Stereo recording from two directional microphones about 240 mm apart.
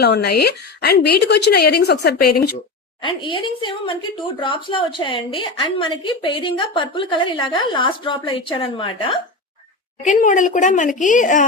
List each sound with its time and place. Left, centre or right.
0.0 s a woman's voice: left
3.0 s a woman's voice: left
10.0 s a woman's voice: left